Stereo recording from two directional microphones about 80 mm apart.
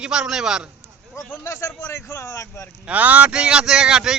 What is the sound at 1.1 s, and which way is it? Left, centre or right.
Speech, left.